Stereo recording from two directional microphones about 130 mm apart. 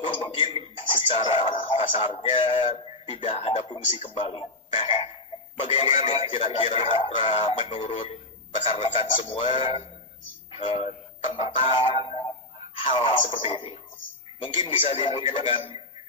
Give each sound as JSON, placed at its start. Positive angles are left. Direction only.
{"t": 0.0, "sound": "a man's voice", "side_deg": 40}
{"t": 3.1, "sound": "speech", "side_deg": 55}
{"t": 3.6, "sound": "a man's voice", "side_deg": 35}
{"t": 8.7, "sound": "a man's voice", "side_deg": 45}